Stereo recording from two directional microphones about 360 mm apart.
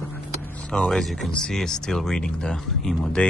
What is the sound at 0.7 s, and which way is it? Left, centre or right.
Speech, centre.